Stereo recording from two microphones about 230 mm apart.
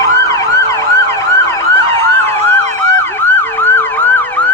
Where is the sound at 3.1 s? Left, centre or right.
Centre.